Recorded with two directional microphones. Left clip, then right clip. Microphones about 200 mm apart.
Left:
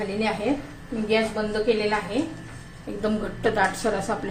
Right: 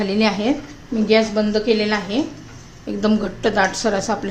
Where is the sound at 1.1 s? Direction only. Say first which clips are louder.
Right 7 dB; 55° right (ahead or behind).